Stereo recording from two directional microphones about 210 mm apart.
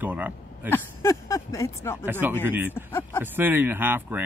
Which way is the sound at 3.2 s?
10° right (ahead or behind).